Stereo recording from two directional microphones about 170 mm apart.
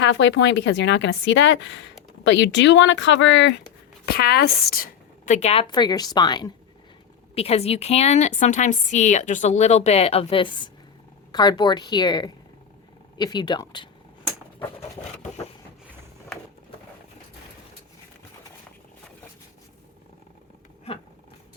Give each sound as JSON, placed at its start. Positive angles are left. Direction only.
{"t": 0.0, "sound": "a woman's voice", "side_deg": 90}
{"t": 4.0, "sound": "a woman's voice", "side_deg": 65}
{"t": 5.3, "sound": "a woman's voice", "side_deg": 40}
{"t": 7.3, "sound": "a woman's voice", "side_deg": 35}
{"t": 14.8, "sound": "a sound", "side_deg": 40}
{"t": 16.3, "sound": "a sound", "side_deg": 5}